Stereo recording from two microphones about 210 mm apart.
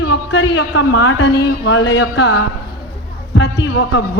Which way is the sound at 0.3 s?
55° left (ahead or behind).